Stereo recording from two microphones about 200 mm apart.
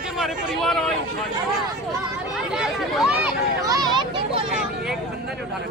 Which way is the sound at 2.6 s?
5° right (ahead or behind).